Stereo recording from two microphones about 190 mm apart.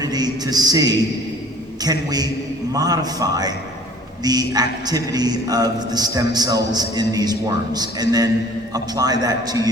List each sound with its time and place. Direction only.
0.0 s a man's voice: 20° right (ahead or behind)